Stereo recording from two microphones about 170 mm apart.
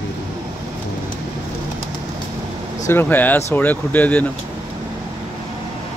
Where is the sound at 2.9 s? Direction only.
10° left (ahead or behind).